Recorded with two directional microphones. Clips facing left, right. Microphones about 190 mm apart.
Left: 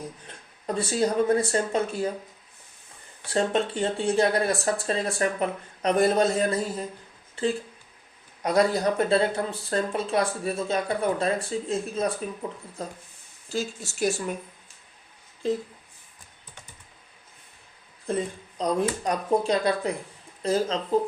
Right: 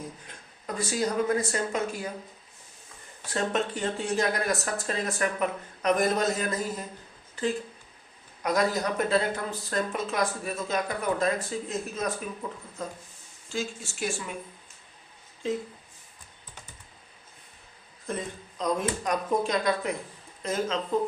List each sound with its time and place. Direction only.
0.3 s speech: 30° left (ahead or behind)
3.2 s speech: 30° left (ahead or behind)
8.4 s speech: 30° left (ahead or behind)
15.4 s speech: 35° left (ahead or behind)
18.0 s speech: 35° left (ahead or behind)